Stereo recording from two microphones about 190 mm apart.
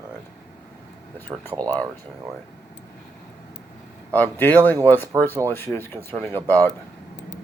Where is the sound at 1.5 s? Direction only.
10° left (ahead or behind).